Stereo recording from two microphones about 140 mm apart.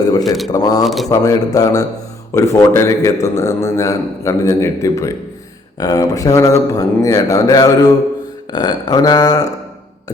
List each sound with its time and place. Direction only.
0.2 s speech: centre (ahead or behind)
0.5 s a man's voice: 25° left (ahead or behind)
0.9 s speech: centre (ahead or behind)
1.1 s a man's voice: 25° left (ahead or behind)